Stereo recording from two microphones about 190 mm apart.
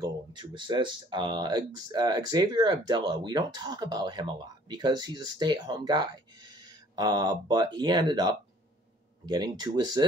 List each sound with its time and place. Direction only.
0.0 s speech: 25° right (ahead or behind)